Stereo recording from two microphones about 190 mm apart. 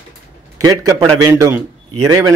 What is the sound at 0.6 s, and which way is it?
A man's voice, 20° right (ahead or behind).